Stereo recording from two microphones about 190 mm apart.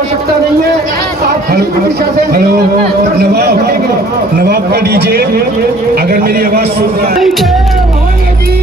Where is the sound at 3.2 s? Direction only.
55° right (ahead or behind).